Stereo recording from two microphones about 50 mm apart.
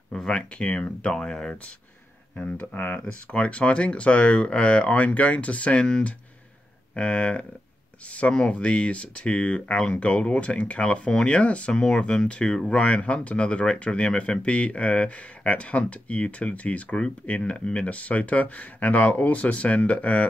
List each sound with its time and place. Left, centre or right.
0.1 s a sound: centre
0.4 s speech: left
2.3 s speech: left